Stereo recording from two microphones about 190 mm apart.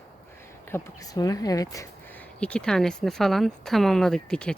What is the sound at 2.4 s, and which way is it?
Speech, 5° left (ahead or behind).